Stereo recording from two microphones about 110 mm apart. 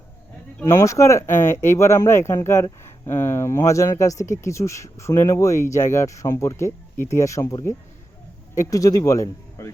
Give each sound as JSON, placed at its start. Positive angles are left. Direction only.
{"t": 0.7, "sound": "speech", "side_deg": 30}
{"t": 8.7, "sound": "speech", "side_deg": 35}